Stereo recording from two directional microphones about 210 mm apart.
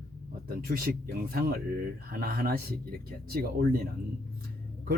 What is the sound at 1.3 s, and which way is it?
Speech, 45° right (ahead or behind).